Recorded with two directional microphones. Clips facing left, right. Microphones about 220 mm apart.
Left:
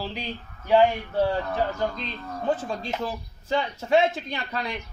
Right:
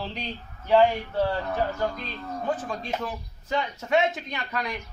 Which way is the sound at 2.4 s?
30° left (ahead or behind).